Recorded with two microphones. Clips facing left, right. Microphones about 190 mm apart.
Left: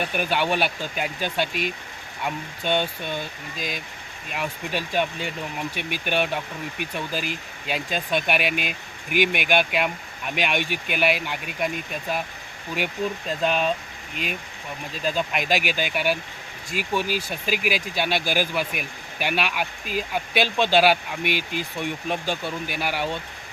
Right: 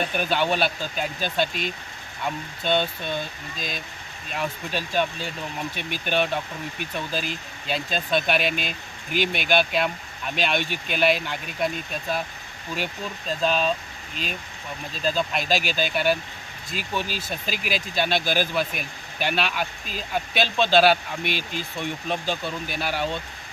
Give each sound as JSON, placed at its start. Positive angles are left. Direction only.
{"t": 0.1, "sound": "speech", "side_deg": 10}
{"t": 15.0, "sound": "speech", "side_deg": 15}